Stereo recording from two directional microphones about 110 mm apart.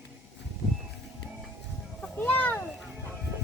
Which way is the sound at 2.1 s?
15° left (ahead or behind).